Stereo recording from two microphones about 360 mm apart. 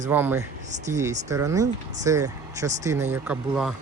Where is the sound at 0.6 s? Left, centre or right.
Centre.